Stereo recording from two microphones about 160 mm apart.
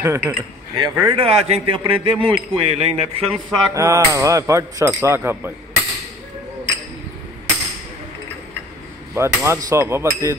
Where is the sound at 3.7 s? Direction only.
20° right (ahead or behind).